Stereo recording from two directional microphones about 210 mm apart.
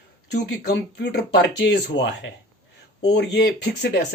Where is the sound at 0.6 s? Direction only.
55° left (ahead or behind).